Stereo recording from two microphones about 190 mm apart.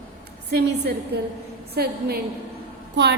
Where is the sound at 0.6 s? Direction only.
60° right (ahead or behind).